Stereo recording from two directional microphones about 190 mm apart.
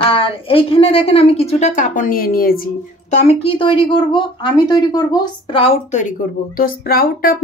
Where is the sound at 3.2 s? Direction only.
30° left (ahead or behind); by 7.4 s 50° left (ahead or behind).